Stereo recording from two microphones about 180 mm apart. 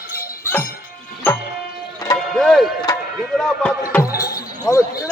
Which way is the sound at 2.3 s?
Centre (ahead or behind).